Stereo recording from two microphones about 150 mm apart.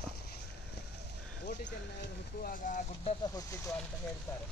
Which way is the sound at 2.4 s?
65° left (ahead or behind).